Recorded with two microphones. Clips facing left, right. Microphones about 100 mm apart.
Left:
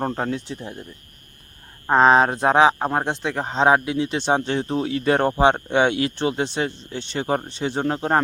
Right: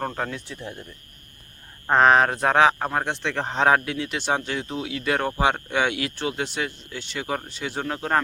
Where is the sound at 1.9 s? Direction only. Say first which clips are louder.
Left 2 dB; 20° left (ahead or behind).